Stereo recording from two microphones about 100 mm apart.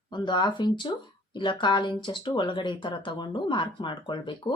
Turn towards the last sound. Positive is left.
turn(degrees=55)  # may be behind; listen again after turning